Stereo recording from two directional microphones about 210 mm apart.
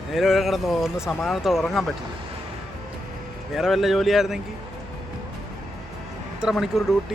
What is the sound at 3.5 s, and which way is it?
Speech, centre (ahead or behind).